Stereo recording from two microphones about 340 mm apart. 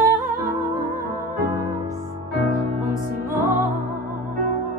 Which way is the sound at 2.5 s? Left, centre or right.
Right.